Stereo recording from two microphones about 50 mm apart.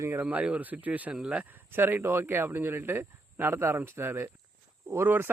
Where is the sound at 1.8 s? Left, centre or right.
Right.